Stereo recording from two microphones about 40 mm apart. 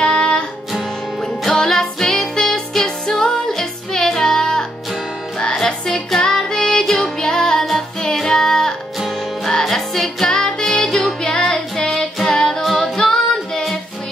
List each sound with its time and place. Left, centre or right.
0.0 s music: left
1.4 s music: centre
12.3 s child singing: centre
12.7 s female singing: centre